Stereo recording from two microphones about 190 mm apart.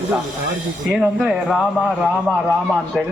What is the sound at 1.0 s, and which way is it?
Speech, centre (ahead or behind).